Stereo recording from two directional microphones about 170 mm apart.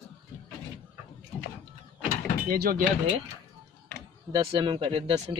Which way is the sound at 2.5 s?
60° right (ahead or behind).